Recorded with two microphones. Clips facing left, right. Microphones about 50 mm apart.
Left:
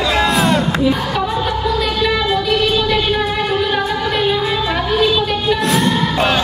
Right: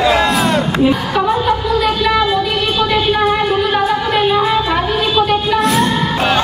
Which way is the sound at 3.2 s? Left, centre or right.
Centre.